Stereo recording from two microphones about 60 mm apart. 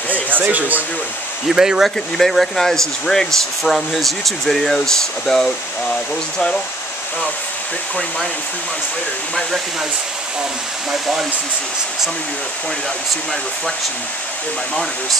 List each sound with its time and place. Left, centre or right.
0.1 s speech: right
1.5 s speech: centre
2.1 s speech: centre
10.9 s speech: centre